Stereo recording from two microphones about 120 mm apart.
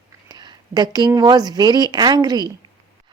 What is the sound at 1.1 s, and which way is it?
A woman's voice, 35° right (ahead or behind).